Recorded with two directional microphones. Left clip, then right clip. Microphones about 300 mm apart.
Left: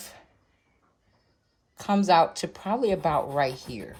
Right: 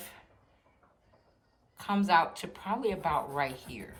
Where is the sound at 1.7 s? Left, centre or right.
Centre.